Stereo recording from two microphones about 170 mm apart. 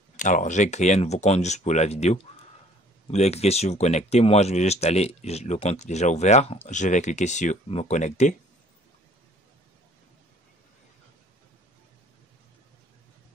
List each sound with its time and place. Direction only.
0.2 s speech: 45° left (ahead or behind)